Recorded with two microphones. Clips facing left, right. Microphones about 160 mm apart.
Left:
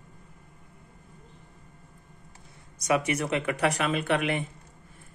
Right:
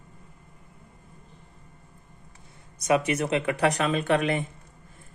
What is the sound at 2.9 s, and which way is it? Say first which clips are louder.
Speech: right 3 dB; 25° right (ahead or behind).